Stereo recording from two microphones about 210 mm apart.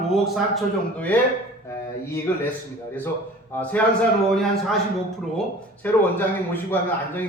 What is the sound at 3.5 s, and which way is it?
Speech, 5° left (ahead or behind).